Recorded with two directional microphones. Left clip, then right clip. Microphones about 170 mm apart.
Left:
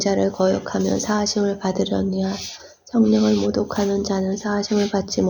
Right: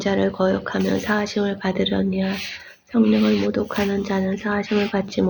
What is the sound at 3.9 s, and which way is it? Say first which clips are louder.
Speech: left 1 dB; 10° left (ahead or behind).